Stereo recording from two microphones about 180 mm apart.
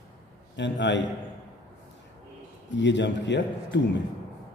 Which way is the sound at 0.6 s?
80° left.